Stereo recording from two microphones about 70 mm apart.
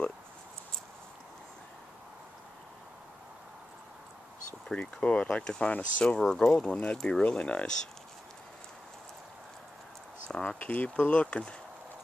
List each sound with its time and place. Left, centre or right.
4.6 s speech: centre
10.6 s speech: left